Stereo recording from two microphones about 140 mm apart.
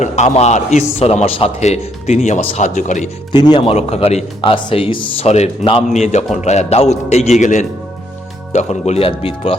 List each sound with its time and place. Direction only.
0.0 s a man's voice: 55° left (ahead or behind)
3.3 s a man's voice: 30° left (ahead or behind)
5.9 s a man's voice: 55° left (ahead or behind)